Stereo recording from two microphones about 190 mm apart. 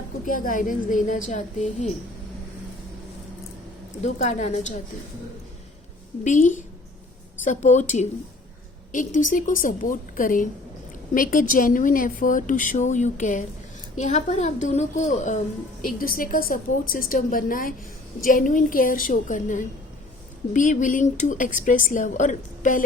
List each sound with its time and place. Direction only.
0.3 s a woman's voice: 45° left (ahead or behind)
4.0 s a child's voice: 35° left (ahead or behind)
6.2 s a child's voice: 40° left (ahead or behind)